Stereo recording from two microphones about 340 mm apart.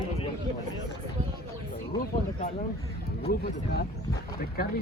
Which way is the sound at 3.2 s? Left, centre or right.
Left.